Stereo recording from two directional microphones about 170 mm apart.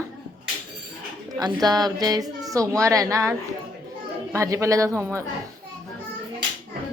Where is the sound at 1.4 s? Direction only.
25° right (ahead or behind).